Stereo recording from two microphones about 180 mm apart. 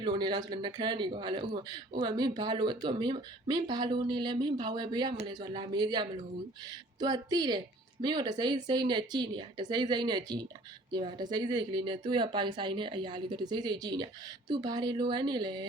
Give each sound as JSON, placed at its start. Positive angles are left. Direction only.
{"t": 0.0, "sound": "speech", "side_deg": -25}